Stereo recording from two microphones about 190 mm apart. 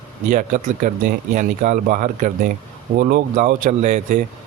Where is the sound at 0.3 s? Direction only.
45° right (ahead or behind).